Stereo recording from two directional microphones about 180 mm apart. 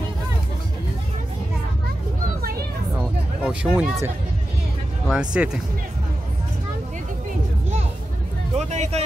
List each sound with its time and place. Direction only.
3.4 s speech: 5° right (ahead or behind)
5.1 s speech: 5° right (ahead or behind)
8.5 s vehicle: 40° right (ahead or behind)